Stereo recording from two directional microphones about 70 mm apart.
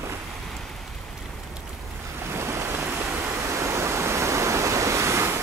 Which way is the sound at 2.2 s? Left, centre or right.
Right.